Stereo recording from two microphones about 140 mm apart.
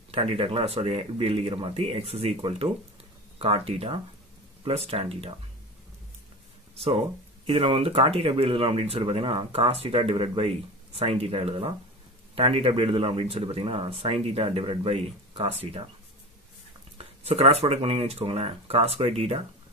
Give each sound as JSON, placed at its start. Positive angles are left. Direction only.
{"t": 0.1, "sound": "speech", "side_deg": -45}
{"t": 6.7, "sound": "a sound", "side_deg": -45}
{"t": 7.4, "sound": "speech", "side_deg": -40}
{"t": 17.0, "sound": "speech", "side_deg": -45}